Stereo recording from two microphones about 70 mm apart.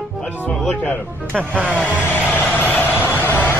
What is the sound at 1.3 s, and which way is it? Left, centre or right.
Vehicle, centre.